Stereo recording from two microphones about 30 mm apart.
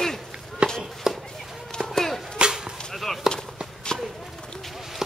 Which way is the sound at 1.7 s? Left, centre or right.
Centre.